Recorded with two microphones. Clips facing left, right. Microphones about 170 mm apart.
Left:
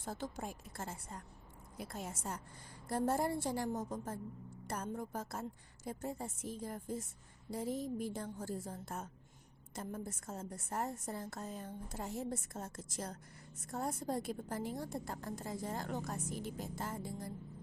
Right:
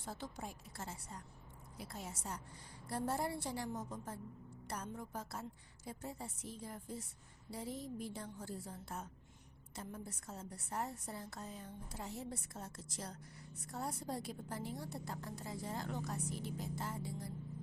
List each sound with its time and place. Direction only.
0.0 s a woman's voice: 45° left (ahead or behind)